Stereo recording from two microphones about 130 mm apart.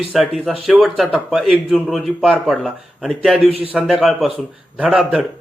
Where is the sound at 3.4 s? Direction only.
50° right (ahead or behind).